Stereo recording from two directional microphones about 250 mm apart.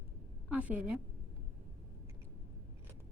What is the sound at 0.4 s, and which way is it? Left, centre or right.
Speech, centre.